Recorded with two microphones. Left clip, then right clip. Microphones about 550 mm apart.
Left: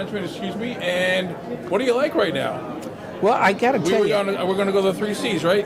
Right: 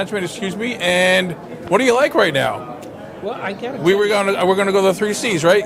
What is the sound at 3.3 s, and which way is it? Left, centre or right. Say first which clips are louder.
Speech: left 8 dB; left.